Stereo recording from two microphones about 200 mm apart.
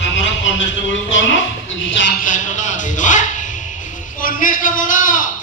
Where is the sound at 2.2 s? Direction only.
40° left (ahead or behind).